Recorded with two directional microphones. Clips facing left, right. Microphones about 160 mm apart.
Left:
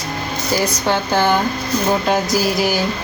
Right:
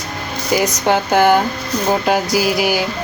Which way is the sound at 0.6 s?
15° right (ahead or behind).